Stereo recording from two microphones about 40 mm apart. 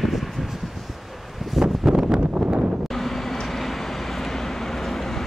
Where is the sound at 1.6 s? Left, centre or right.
Centre.